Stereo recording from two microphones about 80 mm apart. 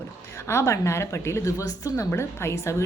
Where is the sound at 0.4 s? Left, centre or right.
Left.